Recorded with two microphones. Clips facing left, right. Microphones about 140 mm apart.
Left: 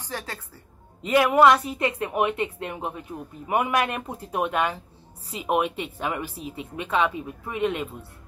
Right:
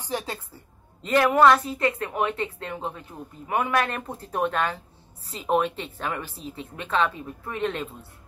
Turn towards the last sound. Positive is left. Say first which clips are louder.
# left 2 dB
turn(degrees=10)  # may be behind; listen again after turning